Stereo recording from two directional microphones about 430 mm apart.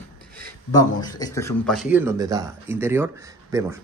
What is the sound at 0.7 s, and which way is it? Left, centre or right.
Speech, centre.